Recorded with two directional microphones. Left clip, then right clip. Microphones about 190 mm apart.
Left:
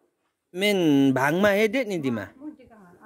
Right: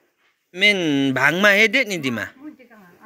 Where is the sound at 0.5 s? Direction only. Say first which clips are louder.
Right 4 dB; 25° left (ahead or behind).